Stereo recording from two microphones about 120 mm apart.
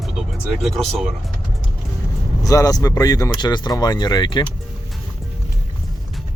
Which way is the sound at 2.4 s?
30° left (ahead or behind).